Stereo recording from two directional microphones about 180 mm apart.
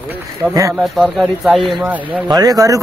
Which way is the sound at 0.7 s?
Centre (ahead or behind).